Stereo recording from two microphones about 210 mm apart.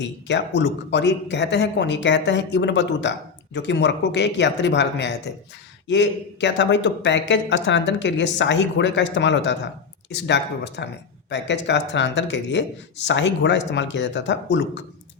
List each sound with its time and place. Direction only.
0.0 s a man's voice: 55° left (ahead or behind)